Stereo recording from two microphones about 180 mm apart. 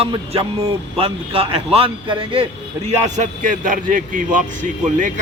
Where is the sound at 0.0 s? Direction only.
30° right (ahead or behind).